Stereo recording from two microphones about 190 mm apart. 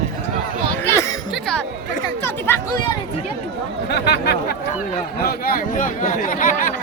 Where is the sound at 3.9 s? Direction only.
60° left (ahead or behind); by 6.7 s 45° left (ahead or behind).